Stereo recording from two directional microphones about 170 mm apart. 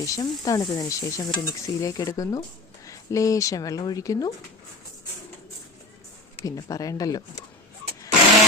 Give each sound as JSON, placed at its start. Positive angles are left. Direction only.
{"t": 0.0, "sound": "stir", "side_deg": 20}
{"t": 6.4, "sound": "stir", "side_deg": 20}